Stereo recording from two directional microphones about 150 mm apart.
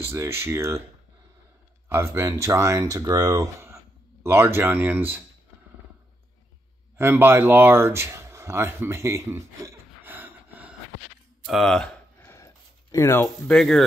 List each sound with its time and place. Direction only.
0.0 s speech: 15° right (ahead or behind)
1.9 s speech: 15° right (ahead or behind)
7.0 s speech: 15° right (ahead or behind)
11.4 s speech: centre (ahead or behind)
12.2 s a sound: 20° left (ahead or behind)
13.6 s speech: centre (ahead or behind)